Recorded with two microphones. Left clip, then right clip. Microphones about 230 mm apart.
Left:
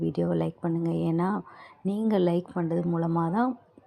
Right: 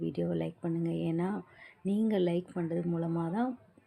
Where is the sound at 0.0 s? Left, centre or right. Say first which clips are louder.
Left 6 dB; centre.